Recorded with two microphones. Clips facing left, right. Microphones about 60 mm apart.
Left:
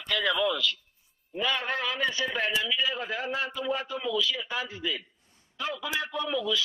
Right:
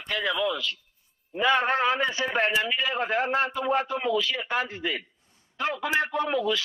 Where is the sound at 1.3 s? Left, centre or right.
Right.